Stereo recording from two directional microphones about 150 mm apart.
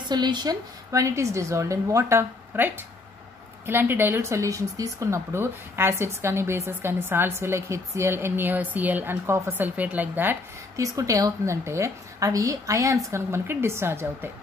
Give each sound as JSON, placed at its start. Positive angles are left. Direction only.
{"t": 0.1, "sound": "a woman's voice", "side_deg": -30}
{"t": 10.8, "sound": "a woman's voice", "side_deg": -20}